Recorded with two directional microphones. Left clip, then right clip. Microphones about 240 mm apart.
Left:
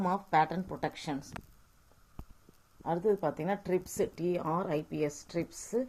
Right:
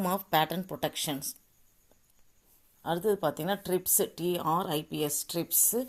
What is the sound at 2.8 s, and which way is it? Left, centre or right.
A woman's voice, right.